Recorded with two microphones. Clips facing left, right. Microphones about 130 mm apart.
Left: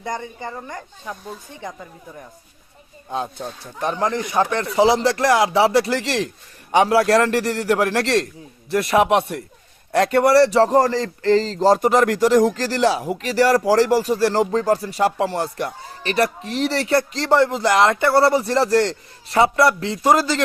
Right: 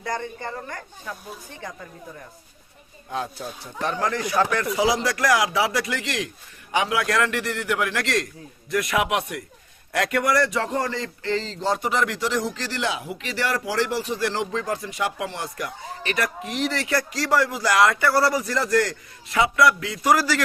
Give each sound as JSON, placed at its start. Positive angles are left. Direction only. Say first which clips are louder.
{"t": 0.0, "sound": "speech", "louder": "left 1 dB", "side_deg": 20}
{"t": 3.1, "sound": "speech", "louder": "left 3 dB", "side_deg": 20}